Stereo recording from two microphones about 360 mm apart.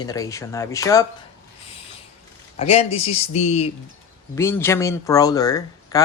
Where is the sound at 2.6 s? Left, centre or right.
Centre.